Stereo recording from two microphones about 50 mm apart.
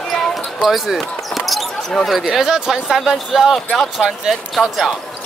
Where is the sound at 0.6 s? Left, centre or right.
Centre.